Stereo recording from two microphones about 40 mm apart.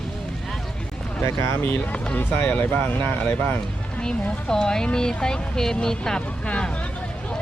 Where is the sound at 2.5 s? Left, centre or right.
Left.